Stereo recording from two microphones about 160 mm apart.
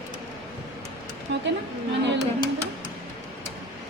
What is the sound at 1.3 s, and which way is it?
Speech, 90° right.